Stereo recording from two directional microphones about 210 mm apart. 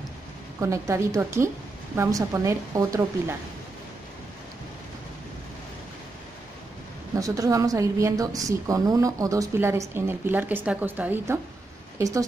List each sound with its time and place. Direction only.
0.6 s a woman's voice: 15° right (ahead or behind)
7.2 s a woman's voice: 15° right (ahead or behind)